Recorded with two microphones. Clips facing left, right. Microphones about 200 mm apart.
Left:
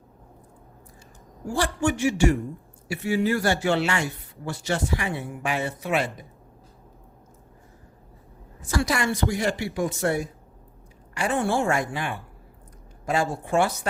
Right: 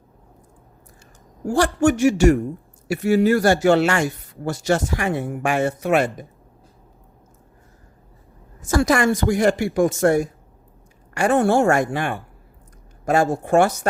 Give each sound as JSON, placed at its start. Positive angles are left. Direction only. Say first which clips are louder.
{"t": 1.5, "sound": "speech", "louder": "right 7 dB", "side_deg": -45}
{"t": 8.6, "sound": "speech", "louder": "right 7 dB", "side_deg": -50}